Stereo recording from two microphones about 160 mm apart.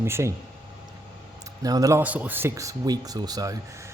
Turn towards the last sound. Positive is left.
turn(degrees=-20)  # may be behind; listen again after turning